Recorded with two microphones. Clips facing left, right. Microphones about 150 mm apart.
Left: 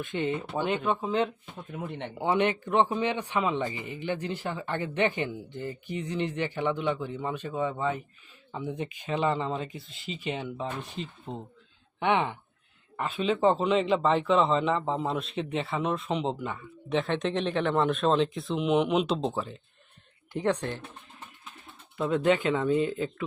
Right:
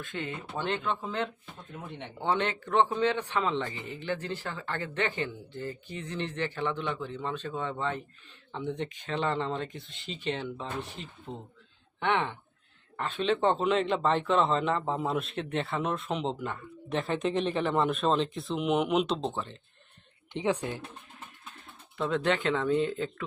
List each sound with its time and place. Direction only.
0.0 s a man's voice: 20° left (ahead or behind); by 20.8 s 5° right (ahead or behind)
21.9 s speech: 5° left (ahead or behind)